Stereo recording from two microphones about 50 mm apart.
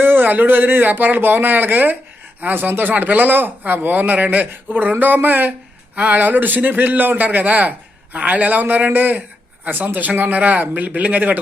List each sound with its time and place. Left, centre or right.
0.0 s a man's voice: right